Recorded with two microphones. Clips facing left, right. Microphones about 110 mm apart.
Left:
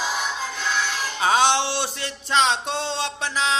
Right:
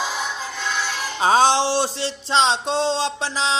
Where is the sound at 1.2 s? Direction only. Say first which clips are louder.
Right 3 dB; 35° right (ahead or behind).